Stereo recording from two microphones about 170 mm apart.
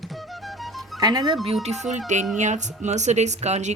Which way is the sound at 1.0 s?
25° right (ahead or behind).